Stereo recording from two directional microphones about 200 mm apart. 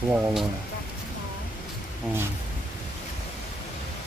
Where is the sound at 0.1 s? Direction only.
Centre (ahead or behind).